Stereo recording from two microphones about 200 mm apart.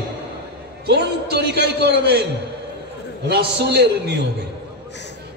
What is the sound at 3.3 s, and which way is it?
Speech, 55° right (ahead or behind).